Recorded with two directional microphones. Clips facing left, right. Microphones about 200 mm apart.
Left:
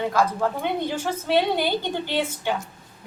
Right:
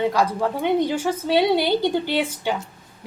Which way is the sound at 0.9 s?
10° right (ahead or behind).